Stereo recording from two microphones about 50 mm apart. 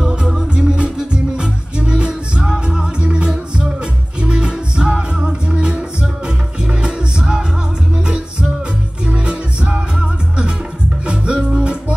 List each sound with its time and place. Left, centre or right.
0.5 s music: centre